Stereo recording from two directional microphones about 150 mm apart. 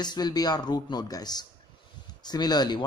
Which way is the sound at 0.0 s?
25° left (ahead or behind).